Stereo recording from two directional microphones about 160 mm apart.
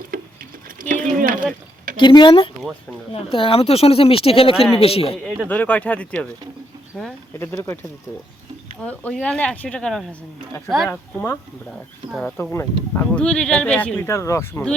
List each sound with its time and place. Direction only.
0.1 s a sound: 60° right (ahead or behind)
2.0 s speech: 30° left (ahead or behind)
5.2 s speech: centre (ahead or behind)
5.5 s speech: 10° left (ahead or behind)
10.8 s speech: 15° left (ahead or behind)